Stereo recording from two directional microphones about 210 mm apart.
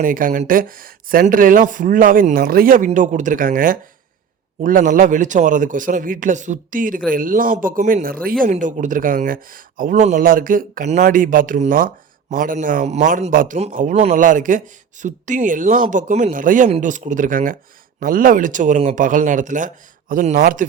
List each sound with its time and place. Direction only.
0.0 s a man's voice: 40° right (ahead or behind)